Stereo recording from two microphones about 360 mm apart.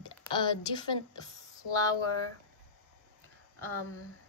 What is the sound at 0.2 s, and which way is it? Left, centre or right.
Speech, centre.